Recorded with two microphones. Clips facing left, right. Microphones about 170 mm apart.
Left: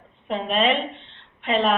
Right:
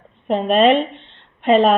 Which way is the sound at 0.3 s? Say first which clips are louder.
Right 8 dB; 45° right (ahead or behind).